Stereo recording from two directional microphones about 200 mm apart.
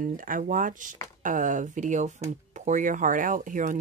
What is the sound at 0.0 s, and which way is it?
Speech, 40° right (ahead or behind).